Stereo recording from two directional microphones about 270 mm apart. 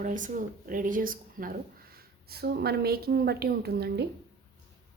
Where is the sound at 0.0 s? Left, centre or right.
Right.